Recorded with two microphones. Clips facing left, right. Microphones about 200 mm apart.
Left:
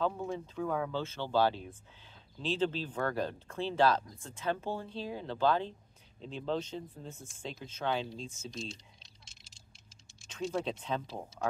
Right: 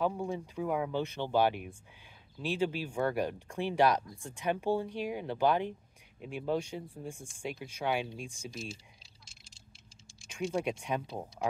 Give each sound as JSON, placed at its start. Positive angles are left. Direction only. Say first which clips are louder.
{"t": 0.0, "sound": "speech", "louder": "right 1 dB", "side_deg": -15}
{"t": 10.2, "sound": "speech", "louder": "right 2 dB", "side_deg": -10}